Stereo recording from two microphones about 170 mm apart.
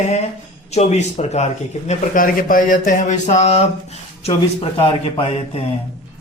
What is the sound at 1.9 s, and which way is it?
Speech, 55° left (ahead or behind).